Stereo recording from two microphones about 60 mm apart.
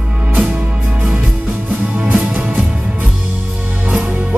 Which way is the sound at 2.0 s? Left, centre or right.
Right.